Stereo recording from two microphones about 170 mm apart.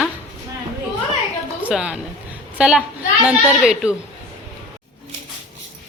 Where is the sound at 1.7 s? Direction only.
5° right (ahead or behind).